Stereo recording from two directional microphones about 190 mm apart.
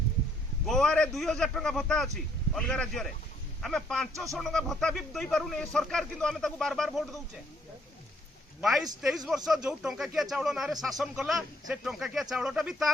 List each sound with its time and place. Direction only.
0.7 s a man's voice: 5° left (ahead or behind)
9.0 s a man's voice: centre (ahead or behind)